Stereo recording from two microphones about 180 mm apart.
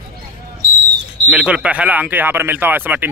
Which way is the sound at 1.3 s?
5° right (ahead or behind).